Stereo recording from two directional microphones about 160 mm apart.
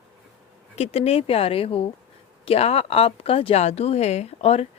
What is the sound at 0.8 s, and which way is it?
Speech, 40° left (ahead or behind).